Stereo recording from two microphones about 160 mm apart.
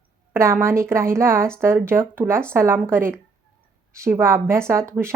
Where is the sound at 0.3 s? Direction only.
15° right (ahead or behind).